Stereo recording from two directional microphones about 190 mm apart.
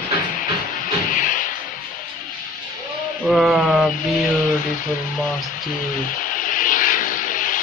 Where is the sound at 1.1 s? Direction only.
45° left (ahead or behind).